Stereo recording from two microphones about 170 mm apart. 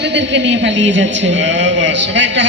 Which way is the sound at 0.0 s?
90° right.